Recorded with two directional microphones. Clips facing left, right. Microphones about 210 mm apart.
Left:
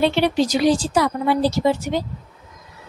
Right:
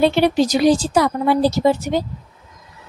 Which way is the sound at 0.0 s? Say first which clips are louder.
Right 3 dB; 45° right (ahead or behind).